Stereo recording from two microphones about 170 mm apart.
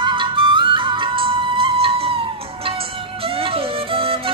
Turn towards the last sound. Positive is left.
turn(degrees=-30)  # may be behind; listen again after turning